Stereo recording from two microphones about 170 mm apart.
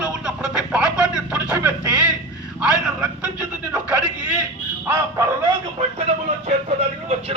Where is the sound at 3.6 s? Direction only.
5° right (ahead or behind).